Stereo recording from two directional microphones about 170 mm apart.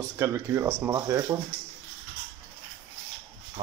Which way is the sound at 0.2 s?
15° right (ahead or behind).